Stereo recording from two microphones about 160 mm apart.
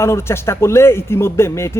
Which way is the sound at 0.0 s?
15° left (ahead or behind).